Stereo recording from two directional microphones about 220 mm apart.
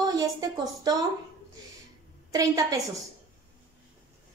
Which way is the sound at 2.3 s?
15° right (ahead or behind).